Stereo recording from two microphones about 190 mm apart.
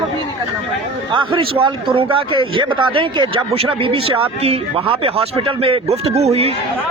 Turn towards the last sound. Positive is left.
turn(degrees=-35)  # may be behind; listen again after turning